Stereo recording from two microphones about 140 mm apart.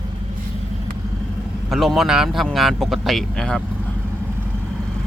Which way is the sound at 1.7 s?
Centre (ahead or behind).